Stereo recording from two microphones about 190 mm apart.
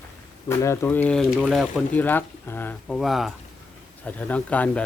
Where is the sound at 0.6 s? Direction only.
15° left (ahead or behind).